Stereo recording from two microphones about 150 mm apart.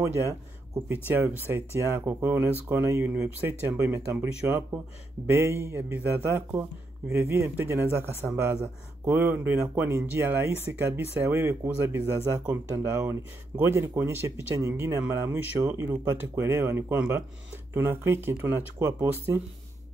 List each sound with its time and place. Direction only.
0.0 s speech: 20° right (ahead or behind)